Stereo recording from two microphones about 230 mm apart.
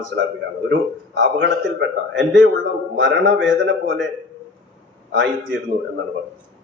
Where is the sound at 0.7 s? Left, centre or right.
Right.